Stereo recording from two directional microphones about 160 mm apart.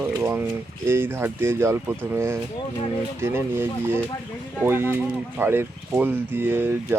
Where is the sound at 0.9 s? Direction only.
15° right (ahead or behind).